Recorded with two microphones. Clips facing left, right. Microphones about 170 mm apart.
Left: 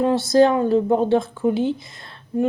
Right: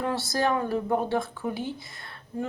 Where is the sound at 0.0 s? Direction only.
20° left (ahead or behind).